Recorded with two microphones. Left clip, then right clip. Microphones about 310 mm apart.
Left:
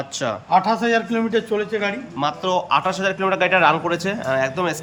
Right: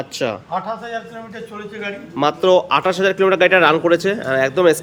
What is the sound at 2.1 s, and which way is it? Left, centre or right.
Speech, centre.